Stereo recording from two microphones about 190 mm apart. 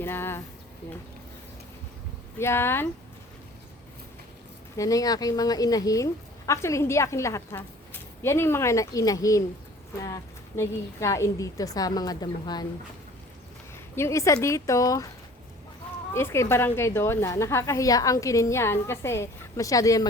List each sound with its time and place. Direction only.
0.0 s speech: 10° left (ahead or behind)
2.4 s a woman's voice: 15° left (ahead or behind)
4.8 s a woman's voice: 20° left (ahead or behind)
10.6 s a woman's voice: 15° left (ahead or behind)
13.9 s a woman's voice: 15° left (ahead or behind)
16.1 s a woman's voice: 15° left (ahead or behind)